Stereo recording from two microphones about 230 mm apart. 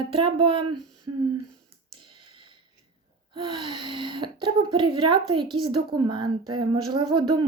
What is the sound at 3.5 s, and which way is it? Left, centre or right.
Humming, right.